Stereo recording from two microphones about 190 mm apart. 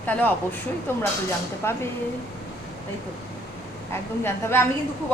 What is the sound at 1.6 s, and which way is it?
Speech, 15° left (ahead or behind).